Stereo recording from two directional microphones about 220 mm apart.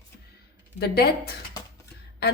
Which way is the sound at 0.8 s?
45° left (ahead or behind).